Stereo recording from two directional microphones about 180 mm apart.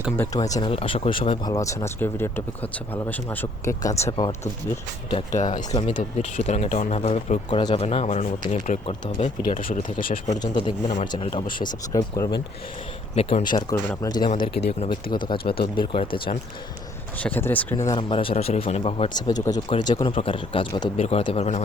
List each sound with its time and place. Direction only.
0.3 s speech: 20° left (ahead or behind)
0.7 s speech: 35° left (ahead or behind)
1.5 s speech: 20° left (ahead or behind)
5.1 s speech: 40° left (ahead or behind)
9.4 s speech: 50° left (ahead or behind)
10.4 s speech: 25° left (ahead or behind)
13.1 s speech: 35° left (ahead or behind)
13.5 s speech: 20° left (ahead or behind)
14.3 s speech: 30° left (ahead or behind)
17.2 s speech: 10° left (ahead or behind)
17.9 s speech: 30° left (ahead or behind)